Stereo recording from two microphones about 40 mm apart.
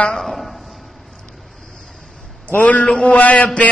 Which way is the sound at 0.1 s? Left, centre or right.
Centre.